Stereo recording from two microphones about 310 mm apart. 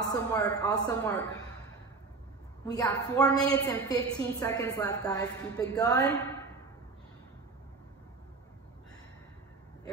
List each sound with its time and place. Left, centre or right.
0.1 s a woman's voice: centre
2.6 s a woman's voice: centre